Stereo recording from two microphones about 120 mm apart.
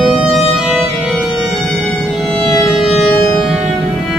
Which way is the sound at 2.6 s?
5° left (ahead or behind).